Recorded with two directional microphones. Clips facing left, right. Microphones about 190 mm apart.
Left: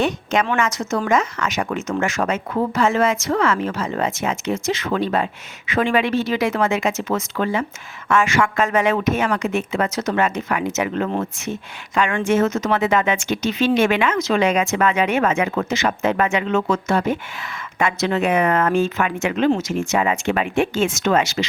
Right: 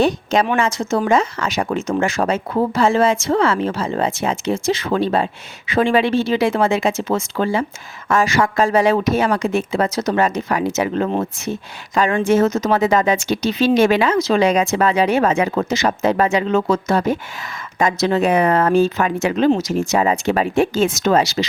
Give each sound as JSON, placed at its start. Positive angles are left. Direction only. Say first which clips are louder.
{"t": 0.0, "sound": "speech", "louder": "right 4 dB", "side_deg": -35}